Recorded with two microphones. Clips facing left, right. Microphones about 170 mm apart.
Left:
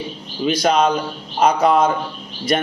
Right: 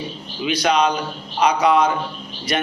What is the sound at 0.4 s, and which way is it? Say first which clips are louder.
A man's voice: left 2 dB; 45° left (ahead or behind).